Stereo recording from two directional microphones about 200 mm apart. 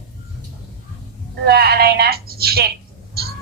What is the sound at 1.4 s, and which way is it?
A woman's voice, 55° right (ahead or behind).